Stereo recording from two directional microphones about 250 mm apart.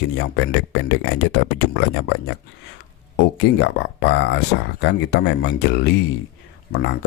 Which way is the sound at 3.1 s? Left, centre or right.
Left.